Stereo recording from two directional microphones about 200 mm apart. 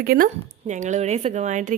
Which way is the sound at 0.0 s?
45° right (ahead or behind).